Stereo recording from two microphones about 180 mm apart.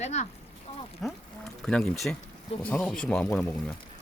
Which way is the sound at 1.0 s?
Centre (ahead or behind).